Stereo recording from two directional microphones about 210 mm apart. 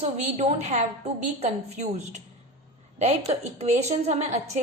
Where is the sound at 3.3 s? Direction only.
30° right (ahead or behind).